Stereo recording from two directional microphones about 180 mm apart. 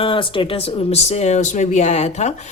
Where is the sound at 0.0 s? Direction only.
30° left (ahead or behind).